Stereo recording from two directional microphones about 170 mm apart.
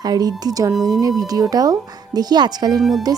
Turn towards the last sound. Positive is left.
turn(degrees=-20)  # may be behind; listen again after turning